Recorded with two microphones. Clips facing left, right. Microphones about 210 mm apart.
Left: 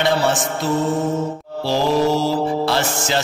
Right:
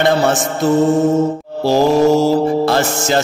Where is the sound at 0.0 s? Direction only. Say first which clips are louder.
Right 4 dB; 45° right (ahead or behind).